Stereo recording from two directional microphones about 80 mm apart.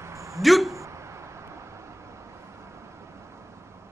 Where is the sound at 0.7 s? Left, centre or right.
Right.